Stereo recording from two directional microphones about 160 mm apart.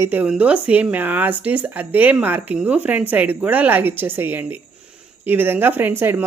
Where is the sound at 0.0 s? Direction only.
10° right (ahead or behind).